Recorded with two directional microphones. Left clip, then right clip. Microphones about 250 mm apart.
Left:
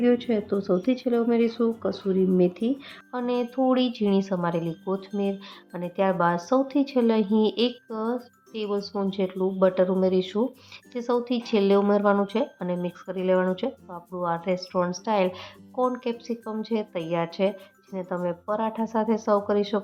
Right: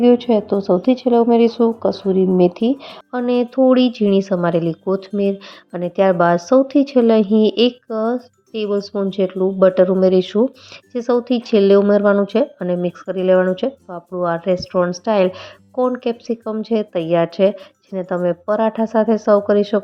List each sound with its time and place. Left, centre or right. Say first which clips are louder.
0.0 s a woman's voice: right 10 dB; centre